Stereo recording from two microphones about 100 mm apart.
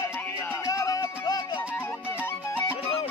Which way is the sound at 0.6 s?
35° left (ahead or behind).